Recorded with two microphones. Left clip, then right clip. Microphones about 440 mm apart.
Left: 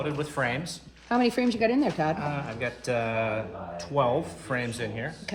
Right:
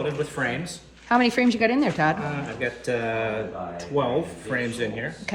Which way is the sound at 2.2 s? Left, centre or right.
Centre.